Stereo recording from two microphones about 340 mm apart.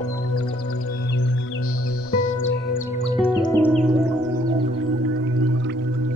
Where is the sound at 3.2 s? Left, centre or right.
Centre.